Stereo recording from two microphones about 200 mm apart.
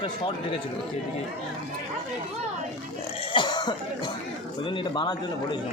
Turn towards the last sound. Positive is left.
turn(degrees=25)  # may be behind; listen again after turning